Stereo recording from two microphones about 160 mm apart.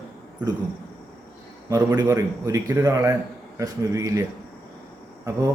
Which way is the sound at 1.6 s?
20° right (ahead or behind).